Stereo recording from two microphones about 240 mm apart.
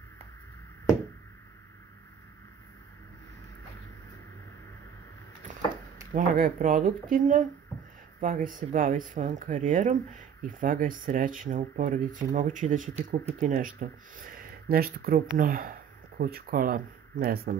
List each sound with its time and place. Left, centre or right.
6.1 s speech: right